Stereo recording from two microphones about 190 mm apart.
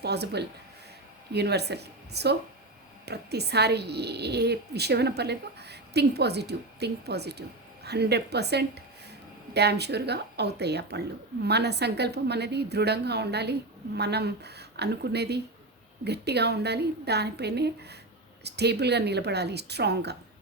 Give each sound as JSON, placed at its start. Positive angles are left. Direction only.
{"t": 0.0, "sound": "speech", "side_deg": -60}